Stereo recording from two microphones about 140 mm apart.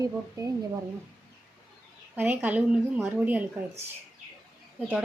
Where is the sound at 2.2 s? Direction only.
10° right (ahead or behind).